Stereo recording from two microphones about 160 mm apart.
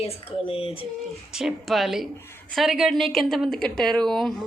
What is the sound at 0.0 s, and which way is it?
Speech, 40° left (ahead or behind).